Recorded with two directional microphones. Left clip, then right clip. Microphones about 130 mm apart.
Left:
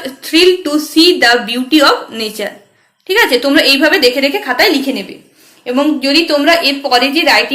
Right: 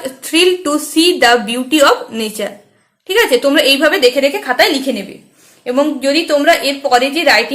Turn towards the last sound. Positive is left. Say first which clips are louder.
# left 1 dB
turn(degrees=-35)  # may be behind; listen again after turning